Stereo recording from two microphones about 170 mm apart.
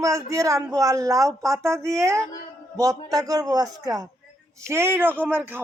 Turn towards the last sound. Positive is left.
turn(degrees=-10)  # may be behind; listen again after turning